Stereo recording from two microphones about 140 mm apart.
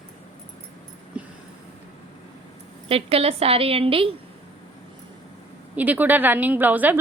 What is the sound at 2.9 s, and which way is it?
A woman's voice, 45° right (ahead or behind).